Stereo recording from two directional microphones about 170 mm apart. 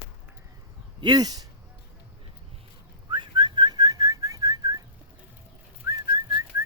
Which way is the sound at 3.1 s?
25° right (ahead or behind).